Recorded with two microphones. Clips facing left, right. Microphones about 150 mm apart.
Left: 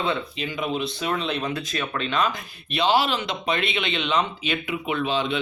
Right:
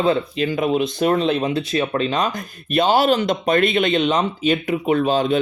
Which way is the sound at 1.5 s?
30° right (ahead or behind).